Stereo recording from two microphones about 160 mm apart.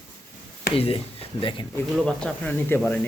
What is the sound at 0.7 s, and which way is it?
Speech, 35° left (ahead or behind).